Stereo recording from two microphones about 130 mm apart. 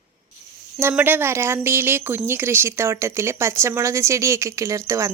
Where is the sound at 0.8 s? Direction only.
15° right (ahead or behind).